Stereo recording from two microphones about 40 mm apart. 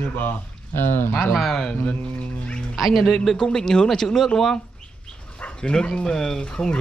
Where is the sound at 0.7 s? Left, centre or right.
Left.